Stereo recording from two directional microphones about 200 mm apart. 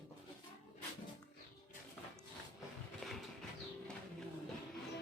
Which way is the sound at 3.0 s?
Centre (ahead or behind).